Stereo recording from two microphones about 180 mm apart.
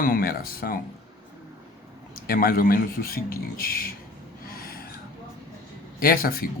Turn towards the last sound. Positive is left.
turn(degrees=55)  # may be behind; listen again after turning